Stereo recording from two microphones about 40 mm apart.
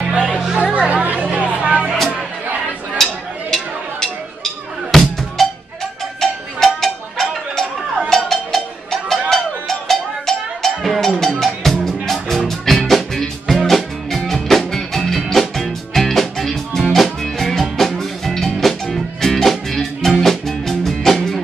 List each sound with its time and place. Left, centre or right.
0.7 s chatter: right
1.2 s vehicle: right
3.0 s a sound: centre
4.9 s drum: centre
5.4 s music: centre
6.2 s cowbell: centre
11.3 s music: centre